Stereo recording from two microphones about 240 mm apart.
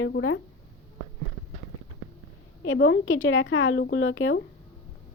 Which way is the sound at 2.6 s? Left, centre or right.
Left.